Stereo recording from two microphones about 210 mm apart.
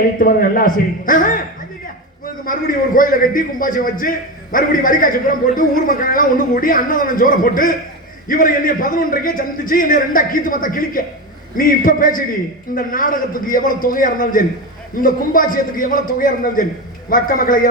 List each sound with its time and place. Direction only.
0.2 s a man's voice: 45° left (ahead or behind)